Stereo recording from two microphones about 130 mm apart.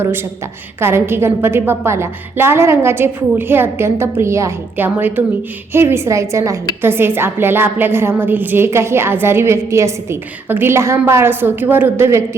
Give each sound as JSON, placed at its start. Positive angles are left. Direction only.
{"t": 0.0, "sound": "a woman's voice", "side_deg": -20}